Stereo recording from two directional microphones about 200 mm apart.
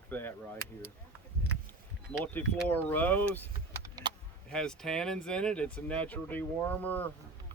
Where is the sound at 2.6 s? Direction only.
10° left (ahead or behind).